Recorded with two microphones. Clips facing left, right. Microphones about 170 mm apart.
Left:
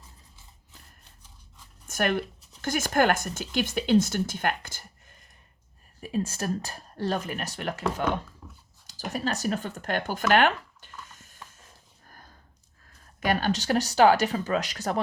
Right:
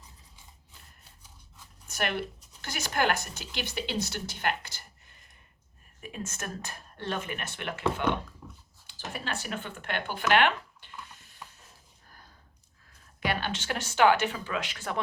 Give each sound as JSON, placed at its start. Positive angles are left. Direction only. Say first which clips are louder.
{"t": 1.9, "sound": "speech", "louder": "left 5 dB", "side_deg": 45}
{"t": 6.0, "sound": "speech", "louder": "left 9 dB", "side_deg": 35}
{"t": 8.4, "sound": "dog", "louder": "right 1 dB", "side_deg": 0}
{"t": 8.9, "sound": "speech", "louder": "left 6 dB", "side_deg": 40}
{"t": 13.1, "sound": "speech", "louder": "left 6 dB", "side_deg": 45}